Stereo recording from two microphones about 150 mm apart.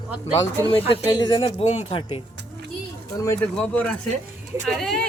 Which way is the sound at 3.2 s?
20° left (ahead or behind).